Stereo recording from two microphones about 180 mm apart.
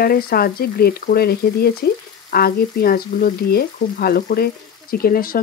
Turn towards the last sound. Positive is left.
turn(degrees=55)  # may be behind; listen again after turning